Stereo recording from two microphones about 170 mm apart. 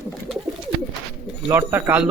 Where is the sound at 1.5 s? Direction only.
15° right (ahead or behind).